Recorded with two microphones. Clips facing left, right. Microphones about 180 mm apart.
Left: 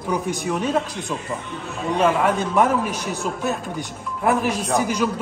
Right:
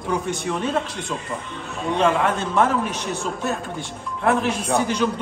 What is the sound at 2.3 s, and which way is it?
Speech, 15° left (ahead or behind).